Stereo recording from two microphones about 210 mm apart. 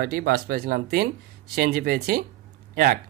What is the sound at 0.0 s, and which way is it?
Speech, 45° right (ahead or behind).